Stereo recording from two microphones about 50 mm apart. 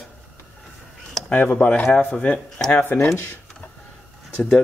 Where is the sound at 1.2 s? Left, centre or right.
Centre.